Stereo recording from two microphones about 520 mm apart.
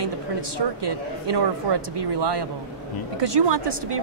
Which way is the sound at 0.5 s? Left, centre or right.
Right.